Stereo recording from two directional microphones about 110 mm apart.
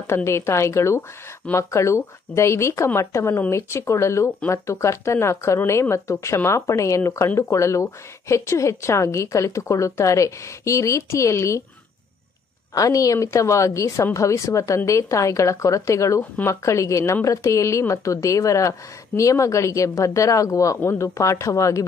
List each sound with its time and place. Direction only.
0.0 s speech: 25° left (ahead or behind)
12.7 s speech: 30° left (ahead or behind)